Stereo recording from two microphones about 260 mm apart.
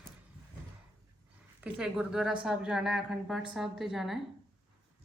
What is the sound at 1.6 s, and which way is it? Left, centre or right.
A woman's voice, centre.